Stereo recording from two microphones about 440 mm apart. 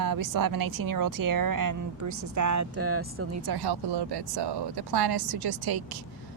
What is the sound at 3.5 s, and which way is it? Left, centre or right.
Speech, right.